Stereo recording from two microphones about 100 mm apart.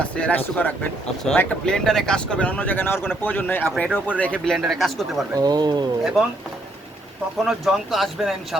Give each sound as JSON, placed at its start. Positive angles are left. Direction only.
{"t": 0.2, "sound": "speech", "side_deg": 15}
{"t": 4.5, "sound": "speech", "side_deg": 0}
{"t": 5.3, "sound": "speech", "side_deg": -40}
{"t": 6.0, "sound": "speech", "side_deg": -5}
{"t": 7.4, "sound": "speech", "side_deg": -5}